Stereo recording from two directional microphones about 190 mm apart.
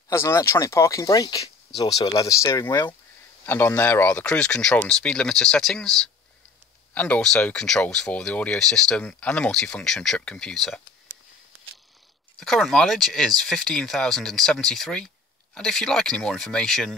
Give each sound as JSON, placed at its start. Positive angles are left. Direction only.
{"t": 0.1, "sound": "speech", "side_deg": 15}
{"t": 12.4, "sound": "speech", "side_deg": 0}